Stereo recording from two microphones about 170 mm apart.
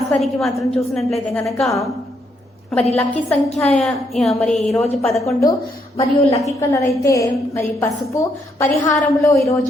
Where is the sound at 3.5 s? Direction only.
5° left (ahead or behind).